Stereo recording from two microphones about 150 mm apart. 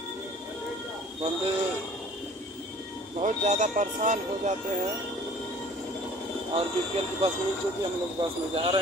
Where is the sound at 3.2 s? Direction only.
55° right (ahead or behind).